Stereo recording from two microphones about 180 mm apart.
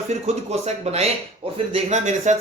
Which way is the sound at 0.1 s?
35° right (ahead or behind).